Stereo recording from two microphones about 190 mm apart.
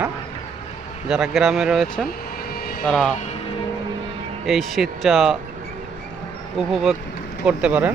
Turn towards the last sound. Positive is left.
turn(degrees=-5)  # may be behind; listen again after turning